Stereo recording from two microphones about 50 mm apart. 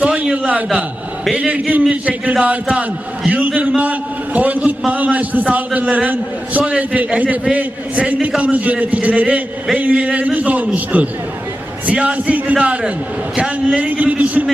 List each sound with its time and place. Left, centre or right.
0.0 s a sound: right
1.4 s a man's voice: right
13.3 s a man's voice: centre
13.7 s a man's voice: right